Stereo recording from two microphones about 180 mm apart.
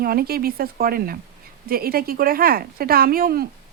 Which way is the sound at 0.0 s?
55° right (ahead or behind).